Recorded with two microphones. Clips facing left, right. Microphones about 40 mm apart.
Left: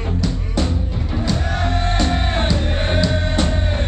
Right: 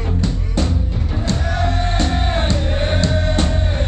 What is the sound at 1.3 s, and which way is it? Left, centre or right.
Music, centre.